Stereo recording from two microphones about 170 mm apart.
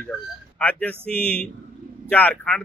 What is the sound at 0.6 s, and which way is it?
Speech, 10° left (ahead or behind).